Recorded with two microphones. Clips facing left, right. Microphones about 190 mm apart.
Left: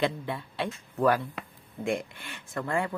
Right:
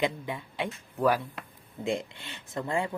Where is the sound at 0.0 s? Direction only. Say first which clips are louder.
Left 1 dB; 15° right (ahead or behind).